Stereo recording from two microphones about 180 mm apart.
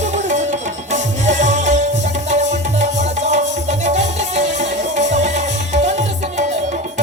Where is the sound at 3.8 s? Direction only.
40° right (ahead or behind).